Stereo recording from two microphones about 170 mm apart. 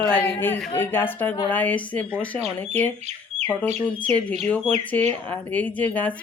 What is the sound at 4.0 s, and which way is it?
Speech, 10° left (ahead or behind).